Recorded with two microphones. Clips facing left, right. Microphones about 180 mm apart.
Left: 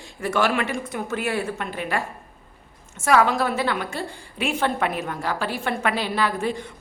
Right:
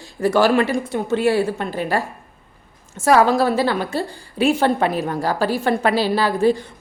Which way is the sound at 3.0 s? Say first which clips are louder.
Right 5 dB; 35° right (ahead or behind).